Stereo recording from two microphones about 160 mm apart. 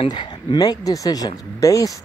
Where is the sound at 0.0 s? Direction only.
30° left (ahead or behind).